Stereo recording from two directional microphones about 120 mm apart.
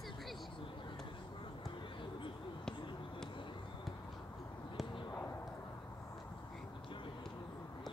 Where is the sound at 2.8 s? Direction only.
45° left (ahead or behind).